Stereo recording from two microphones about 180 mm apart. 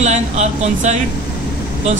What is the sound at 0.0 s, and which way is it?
Speech, 40° right (ahead or behind).